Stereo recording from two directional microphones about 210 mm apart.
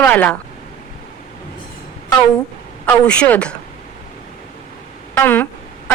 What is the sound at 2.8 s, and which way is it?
Speech, 5° left (ahead or behind).